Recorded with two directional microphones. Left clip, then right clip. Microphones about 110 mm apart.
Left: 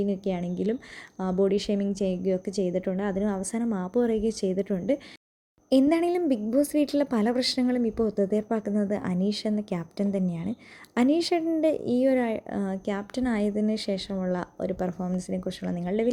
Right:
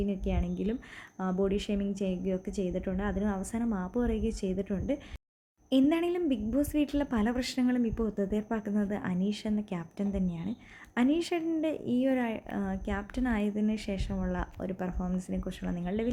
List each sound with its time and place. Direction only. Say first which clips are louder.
0.0 s a woman's voice: left 6 dB; 30° left (ahead or behind)